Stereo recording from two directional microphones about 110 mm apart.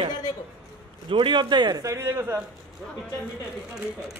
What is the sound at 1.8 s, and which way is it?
Speech, 25° right (ahead or behind).